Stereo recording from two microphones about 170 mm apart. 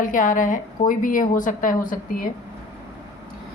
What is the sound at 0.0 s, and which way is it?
Speech, 50° left (ahead or behind).